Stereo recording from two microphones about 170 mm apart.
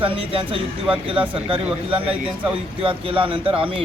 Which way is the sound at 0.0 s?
30° right (ahead or behind).